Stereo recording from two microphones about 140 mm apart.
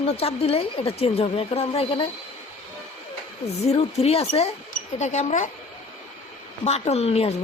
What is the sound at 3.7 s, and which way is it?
Speech, 45° left (ahead or behind).